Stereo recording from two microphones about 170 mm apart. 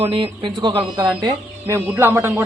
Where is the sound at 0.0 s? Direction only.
30° right (ahead or behind).